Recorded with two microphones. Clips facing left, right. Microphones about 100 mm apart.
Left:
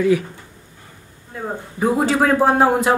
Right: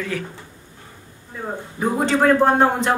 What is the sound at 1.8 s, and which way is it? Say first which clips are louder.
A man's voice: left 2 dB; 5° left (ahead or behind).